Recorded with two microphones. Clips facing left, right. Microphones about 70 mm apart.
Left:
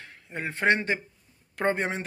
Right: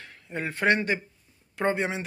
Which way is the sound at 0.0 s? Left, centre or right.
Left.